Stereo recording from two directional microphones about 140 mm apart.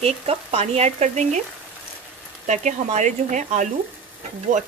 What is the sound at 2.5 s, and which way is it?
Speech, 60° right (ahead or behind).